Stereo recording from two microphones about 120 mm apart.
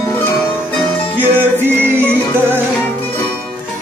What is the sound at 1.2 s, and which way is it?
Music, 15° right (ahead or behind).